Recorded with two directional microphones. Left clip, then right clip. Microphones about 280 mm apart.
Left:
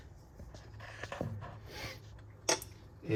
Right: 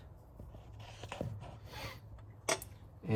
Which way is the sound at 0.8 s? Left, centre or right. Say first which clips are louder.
Left 3 dB; right.